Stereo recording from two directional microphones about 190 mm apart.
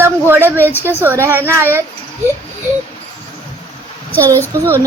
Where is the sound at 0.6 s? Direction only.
10° left (ahead or behind).